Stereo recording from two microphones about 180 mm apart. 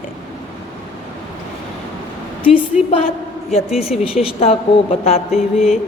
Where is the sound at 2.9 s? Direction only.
35° left (ahead or behind).